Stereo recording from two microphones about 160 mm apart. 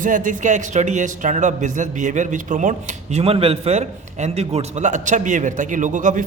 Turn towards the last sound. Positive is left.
turn(degrees=-55)  # may be behind; listen again after turning